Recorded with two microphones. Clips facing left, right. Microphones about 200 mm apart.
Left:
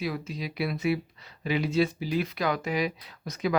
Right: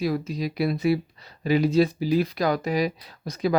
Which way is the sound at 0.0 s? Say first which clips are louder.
Right 6 dB; 40° right (ahead or behind).